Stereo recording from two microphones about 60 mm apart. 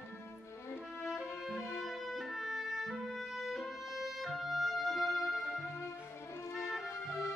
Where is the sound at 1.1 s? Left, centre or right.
Left.